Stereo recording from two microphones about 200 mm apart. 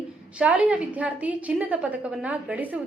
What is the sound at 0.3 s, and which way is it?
A woman's voice, 5° right (ahead or behind).